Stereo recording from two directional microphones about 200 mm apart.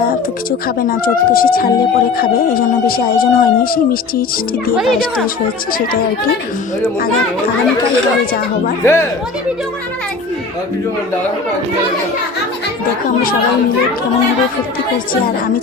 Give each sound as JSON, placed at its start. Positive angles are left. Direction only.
{"t": 0.8, "sound": "speech", "side_deg": 45}
{"t": 8.8, "sound": "speech", "side_deg": 15}